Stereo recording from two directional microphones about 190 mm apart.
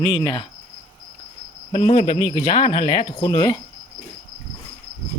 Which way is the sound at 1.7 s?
30° left (ahead or behind).